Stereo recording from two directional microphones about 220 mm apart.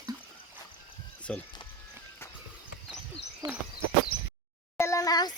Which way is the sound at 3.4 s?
20° right (ahead or behind).